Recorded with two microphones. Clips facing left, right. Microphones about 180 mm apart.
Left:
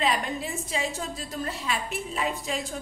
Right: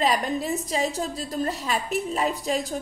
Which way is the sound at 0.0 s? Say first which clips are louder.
Right 4 dB; 40° right (ahead or behind).